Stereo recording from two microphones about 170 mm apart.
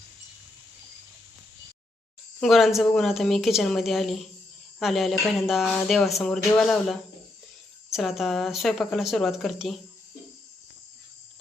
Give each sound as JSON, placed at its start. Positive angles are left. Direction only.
{"t": 2.4, "sound": "speech", "side_deg": 0}